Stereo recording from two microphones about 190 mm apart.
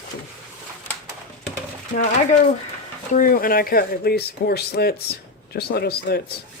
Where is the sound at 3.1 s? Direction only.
45° left (ahead or behind).